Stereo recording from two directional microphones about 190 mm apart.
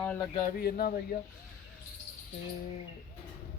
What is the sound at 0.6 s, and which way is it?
Speech, 50° left (ahead or behind).